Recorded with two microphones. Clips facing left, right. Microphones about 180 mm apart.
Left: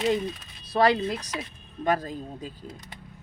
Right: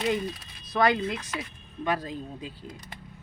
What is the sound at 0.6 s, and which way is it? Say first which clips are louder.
Speech: left 2 dB; 30° left (ahead or behind).